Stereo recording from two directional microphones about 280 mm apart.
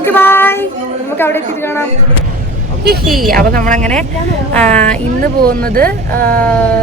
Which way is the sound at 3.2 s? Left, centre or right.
Right.